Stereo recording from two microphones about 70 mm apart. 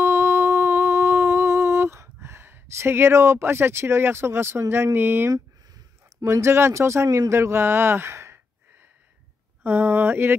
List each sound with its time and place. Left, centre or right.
0.0 s humming: right
6.2 s speech: right